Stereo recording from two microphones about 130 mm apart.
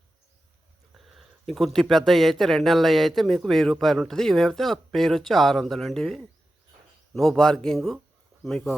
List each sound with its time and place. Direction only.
0.9 s speech: centre (ahead or behind)